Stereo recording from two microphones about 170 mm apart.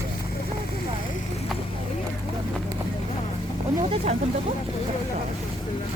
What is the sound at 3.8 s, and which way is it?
Speech, 40° right (ahead or behind).